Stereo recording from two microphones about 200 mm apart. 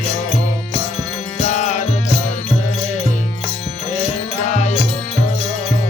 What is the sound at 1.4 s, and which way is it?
Music, 35° left (ahead or behind).